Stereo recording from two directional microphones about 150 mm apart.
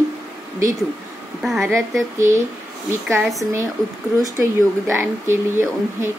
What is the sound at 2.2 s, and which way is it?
Speech, 55° right (ahead or behind).